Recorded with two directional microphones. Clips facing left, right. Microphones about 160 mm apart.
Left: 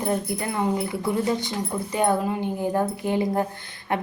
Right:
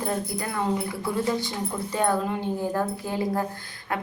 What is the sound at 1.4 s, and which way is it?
A woman's voice, 15° left (ahead or behind).